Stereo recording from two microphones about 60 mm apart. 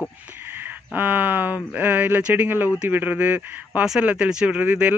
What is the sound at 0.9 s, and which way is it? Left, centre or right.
Speech, right.